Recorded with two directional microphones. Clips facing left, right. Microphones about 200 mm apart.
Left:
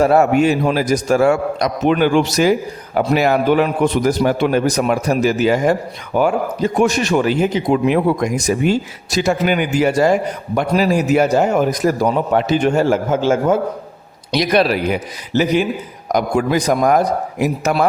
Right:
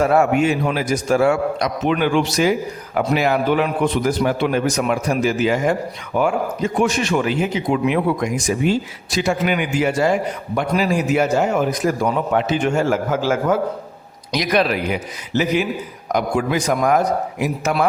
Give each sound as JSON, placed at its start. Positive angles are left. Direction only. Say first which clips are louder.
{"t": 0.0, "sound": "a man's voice", "louder": "left 3 dB", "side_deg": 35}